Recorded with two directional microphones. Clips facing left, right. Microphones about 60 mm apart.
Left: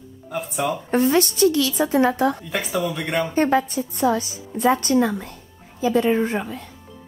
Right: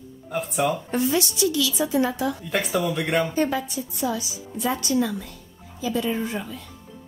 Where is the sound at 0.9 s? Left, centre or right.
Left.